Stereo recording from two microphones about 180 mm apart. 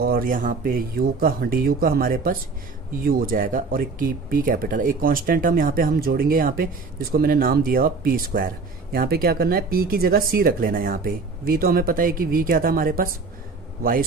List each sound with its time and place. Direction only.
0.0 s speech: 55° right (ahead or behind)